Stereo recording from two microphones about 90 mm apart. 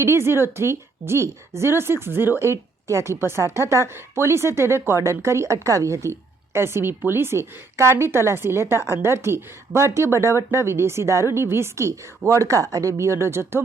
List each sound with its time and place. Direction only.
0.0 s a woman's voice: 30° right (ahead or behind)